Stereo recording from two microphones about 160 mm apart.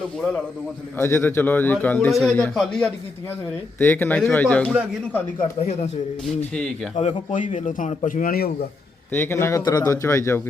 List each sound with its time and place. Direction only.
0.9 s a man's voice: 15° left (ahead or behind)
5.4 s speech: 40° left (ahead or behind)
7.3 s a man's voice: 50° left (ahead or behind); by 8.5 s 70° left (ahead or behind)
9.1 s a man's voice: 15° left (ahead or behind)